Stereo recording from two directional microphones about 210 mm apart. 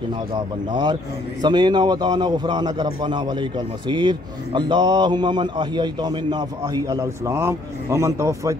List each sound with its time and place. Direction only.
0.3 s a man's voice: 20° right (ahead or behind)